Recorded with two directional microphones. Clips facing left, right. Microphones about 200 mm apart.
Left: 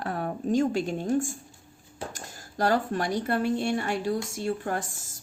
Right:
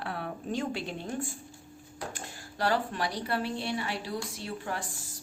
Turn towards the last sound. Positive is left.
turn(degrees=45)  # may be behind; listen again after turning